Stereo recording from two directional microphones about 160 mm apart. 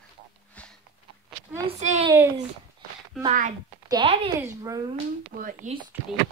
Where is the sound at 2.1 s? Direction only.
15° right (ahead or behind).